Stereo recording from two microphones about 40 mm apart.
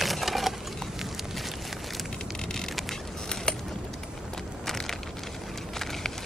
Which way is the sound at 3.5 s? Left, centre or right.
Left.